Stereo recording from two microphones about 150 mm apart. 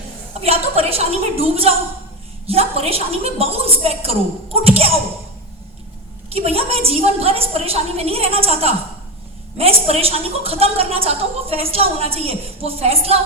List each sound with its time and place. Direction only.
0.4 s a woman's voice: 40° right (ahead or behind)
6.3 s a woman's voice: 40° right (ahead or behind)